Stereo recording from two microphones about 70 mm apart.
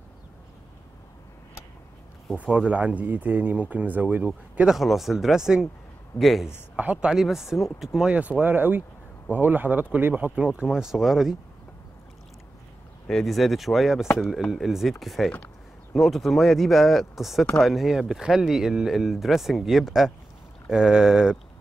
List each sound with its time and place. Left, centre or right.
2.3 s speech: centre
4.3 s speech: centre
6.8 s speech: right
7.1 s speech: centre
8.1 s speech: right
10.3 s speech: centre
13.2 s speech: centre